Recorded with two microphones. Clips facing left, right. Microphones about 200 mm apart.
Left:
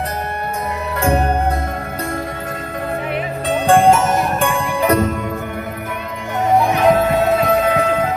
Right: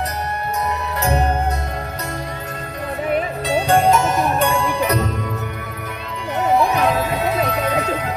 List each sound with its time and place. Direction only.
3.4 s music: 50° left (ahead or behind)
6.7 s music: 50° left (ahead or behind)